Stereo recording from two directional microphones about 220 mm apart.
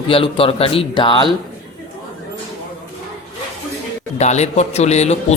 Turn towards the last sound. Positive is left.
turn(degrees=30)  # may be behind; listen again after turning